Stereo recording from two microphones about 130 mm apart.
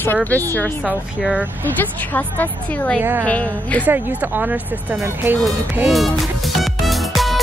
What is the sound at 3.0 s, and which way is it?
Speech, 15° right (ahead or behind).